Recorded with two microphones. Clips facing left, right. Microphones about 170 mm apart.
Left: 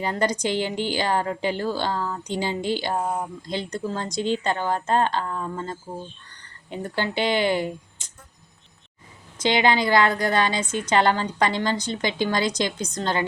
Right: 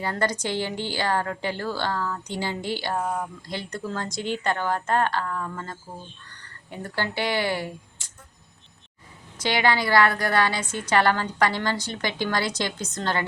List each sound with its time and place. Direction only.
0.0 s a woman's voice: 15° left (ahead or behind)
9.4 s a woman's voice: 20° left (ahead or behind)